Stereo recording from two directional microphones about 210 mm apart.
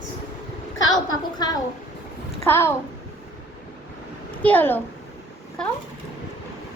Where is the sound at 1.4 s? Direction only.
20° left (ahead or behind).